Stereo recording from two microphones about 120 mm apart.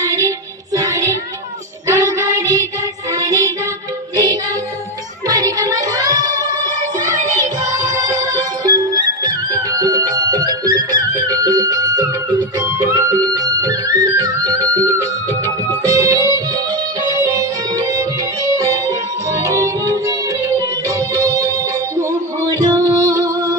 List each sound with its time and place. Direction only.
0.0 s music: 30° right (ahead or behind)